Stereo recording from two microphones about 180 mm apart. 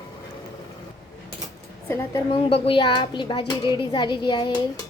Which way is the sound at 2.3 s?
30° left (ahead or behind).